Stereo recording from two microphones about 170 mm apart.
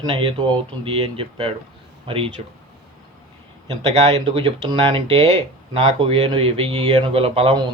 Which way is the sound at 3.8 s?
35° right (ahead or behind).